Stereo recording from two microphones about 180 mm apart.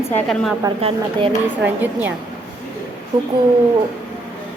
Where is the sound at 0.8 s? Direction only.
30° right (ahead or behind).